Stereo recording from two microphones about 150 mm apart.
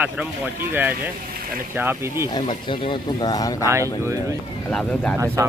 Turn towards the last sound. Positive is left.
turn(degrees=-20)  # may be behind; listen again after turning